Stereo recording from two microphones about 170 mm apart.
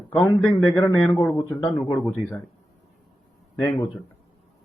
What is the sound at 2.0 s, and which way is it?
Speech, 10° left (ahead or behind).